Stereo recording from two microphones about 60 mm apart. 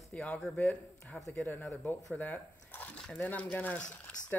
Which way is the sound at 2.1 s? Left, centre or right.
Left.